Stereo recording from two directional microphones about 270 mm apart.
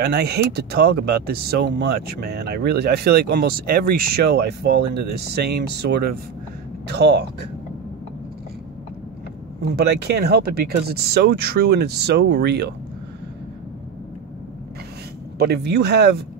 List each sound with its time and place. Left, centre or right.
0.0 s speech: right
9.6 s speech: right
15.3 s speech: right